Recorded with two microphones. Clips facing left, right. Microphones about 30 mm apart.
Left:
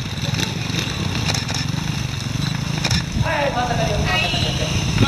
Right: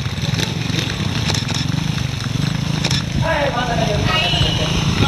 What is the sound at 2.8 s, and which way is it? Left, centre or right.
Vehicle, centre.